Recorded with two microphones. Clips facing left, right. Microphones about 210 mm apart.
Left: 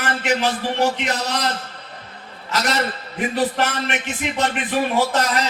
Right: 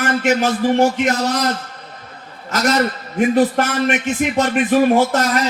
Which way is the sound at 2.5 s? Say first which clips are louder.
Right 5 dB; 45° right (ahead or behind).